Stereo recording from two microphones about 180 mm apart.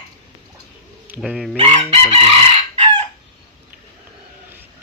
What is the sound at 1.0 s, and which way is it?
Speech, 10° right (ahead or behind).